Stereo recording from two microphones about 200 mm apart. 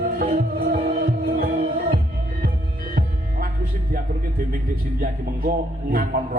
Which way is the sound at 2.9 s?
45° right (ahead or behind).